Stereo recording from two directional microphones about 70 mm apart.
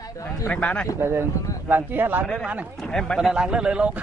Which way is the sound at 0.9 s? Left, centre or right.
Right.